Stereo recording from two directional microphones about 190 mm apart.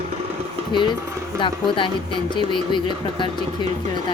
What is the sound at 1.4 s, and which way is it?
Speech, 25° left (ahead or behind).